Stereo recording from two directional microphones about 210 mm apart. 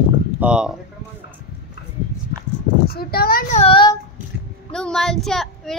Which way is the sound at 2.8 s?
45° left (ahead or behind).